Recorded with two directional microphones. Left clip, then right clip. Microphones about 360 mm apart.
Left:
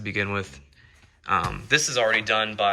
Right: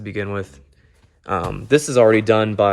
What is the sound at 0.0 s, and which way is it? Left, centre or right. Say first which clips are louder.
Speech: right 1 dB; centre.